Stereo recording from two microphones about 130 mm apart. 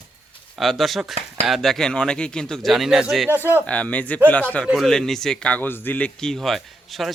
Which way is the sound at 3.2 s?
15° right (ahead or behind).